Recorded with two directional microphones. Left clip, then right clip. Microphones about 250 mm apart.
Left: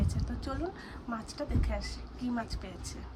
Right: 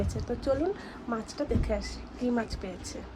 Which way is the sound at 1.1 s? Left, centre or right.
Centre.